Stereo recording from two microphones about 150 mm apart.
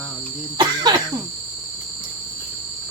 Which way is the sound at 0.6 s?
30° right (ahead or behind).